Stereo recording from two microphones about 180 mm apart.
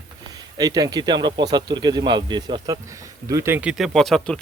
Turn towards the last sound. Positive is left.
turn(degrees=5)  # may be behind; listen again after turning